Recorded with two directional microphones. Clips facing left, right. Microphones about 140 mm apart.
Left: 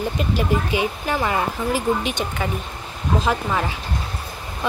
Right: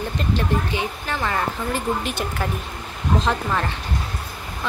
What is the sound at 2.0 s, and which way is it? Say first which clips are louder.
A woman's voice: left 1 dB; centre (ahead or behind).